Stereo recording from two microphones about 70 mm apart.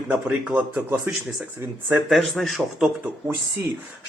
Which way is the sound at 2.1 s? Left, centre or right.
Centre.